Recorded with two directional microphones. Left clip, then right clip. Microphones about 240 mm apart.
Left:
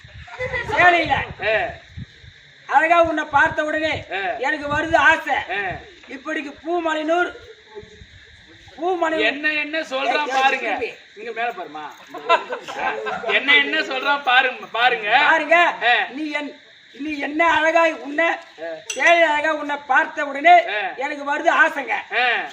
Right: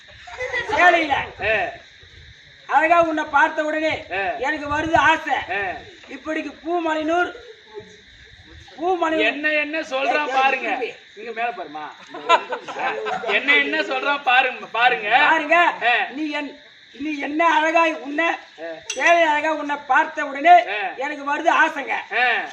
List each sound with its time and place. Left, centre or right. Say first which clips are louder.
0.3 s a sound: even; right
0.8 s a man's voice: left 1 dB; centre
2.6 s a man's voice: left 1 dB; centre
8.8 s a man's voice: even; centre
12.1 s speech: right 1 dB; right
13.3 s a man's voice: left 2 dB; centre